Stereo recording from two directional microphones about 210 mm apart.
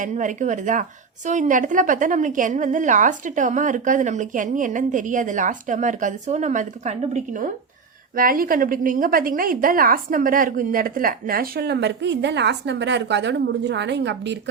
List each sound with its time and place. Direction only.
0.0 s a woman's voice: 35° right (ahead or behind); by 14.3 s 55° right (ahead or behind)